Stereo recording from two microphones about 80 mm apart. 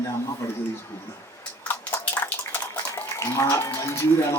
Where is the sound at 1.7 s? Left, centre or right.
Left.